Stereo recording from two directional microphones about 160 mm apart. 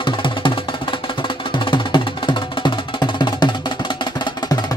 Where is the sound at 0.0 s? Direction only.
30° left (ahead or behind).